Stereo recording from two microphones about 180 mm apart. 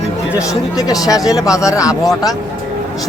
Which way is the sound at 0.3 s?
20° left (ahead or behind).